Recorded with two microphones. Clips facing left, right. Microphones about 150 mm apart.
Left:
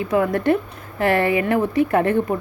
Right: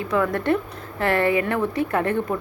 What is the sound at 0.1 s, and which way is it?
A woman's voice, 15° left (ahead or behind).